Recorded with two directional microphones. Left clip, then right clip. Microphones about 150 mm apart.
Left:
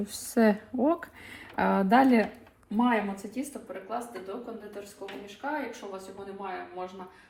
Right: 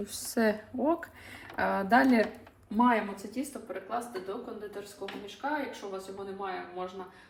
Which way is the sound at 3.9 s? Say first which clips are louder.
Even; centre (ahead or behind).